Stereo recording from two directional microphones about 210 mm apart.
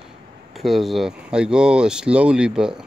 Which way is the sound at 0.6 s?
Centre (ahead or behind).